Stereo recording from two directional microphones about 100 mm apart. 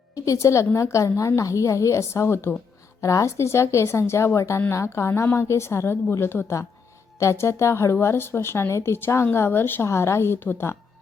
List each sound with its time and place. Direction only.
0.3 s a woman's voice: 30° left (ahead or behind)